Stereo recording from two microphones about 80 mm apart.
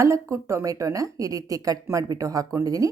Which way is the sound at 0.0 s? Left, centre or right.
Right.